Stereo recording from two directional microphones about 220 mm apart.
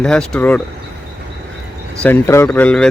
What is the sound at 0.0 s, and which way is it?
Speech, 5° left (ahead or behind).